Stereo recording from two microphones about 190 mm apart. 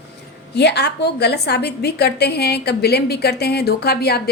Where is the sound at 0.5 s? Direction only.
60° left (ahead or behind).